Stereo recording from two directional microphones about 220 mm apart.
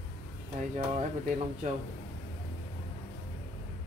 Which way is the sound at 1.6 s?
30° right (ahead or behind).